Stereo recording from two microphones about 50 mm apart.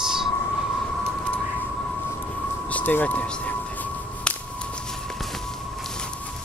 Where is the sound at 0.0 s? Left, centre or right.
Centre.